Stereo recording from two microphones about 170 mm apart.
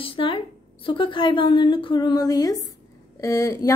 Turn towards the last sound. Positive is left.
turn(degrees=20)  # may be behind; listen again after turning